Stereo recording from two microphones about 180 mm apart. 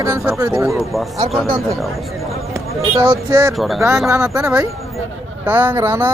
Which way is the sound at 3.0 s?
15° right (ahead or behind).